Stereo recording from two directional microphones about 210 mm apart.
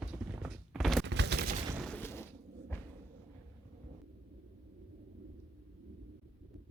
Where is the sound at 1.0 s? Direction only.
55° right (ahead or behind).